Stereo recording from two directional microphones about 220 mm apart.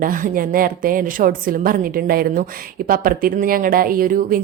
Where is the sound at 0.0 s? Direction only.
40° right (ahead or behind).